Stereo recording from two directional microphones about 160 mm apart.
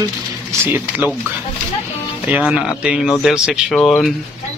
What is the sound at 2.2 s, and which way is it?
Speech, 5° right (ahead or behind).